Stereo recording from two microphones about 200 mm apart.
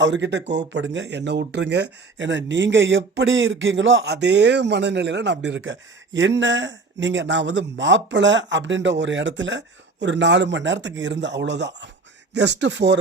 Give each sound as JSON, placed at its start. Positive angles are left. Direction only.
{"t": 0.0, "sound": "speech", "side_deg": -65}